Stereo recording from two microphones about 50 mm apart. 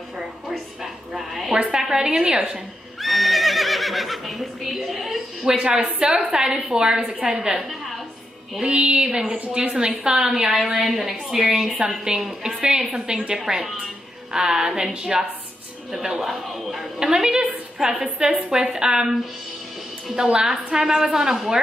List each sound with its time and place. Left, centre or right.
0.2 s a sound: centre
1.8 s a woman's voice: centre
3.0 s neigh: centre
5.5 s a woman's voice: centre
8.6 s a woman's voice: right; by 12.6 s centre
12.6 s a woman's voice: centre
17.0 s a woman's voice: centre